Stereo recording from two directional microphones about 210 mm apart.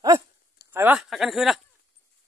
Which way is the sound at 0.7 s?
10° right (ahead or behind).